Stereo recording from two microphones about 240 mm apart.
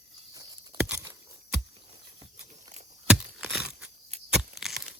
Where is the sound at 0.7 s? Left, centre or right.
Centre.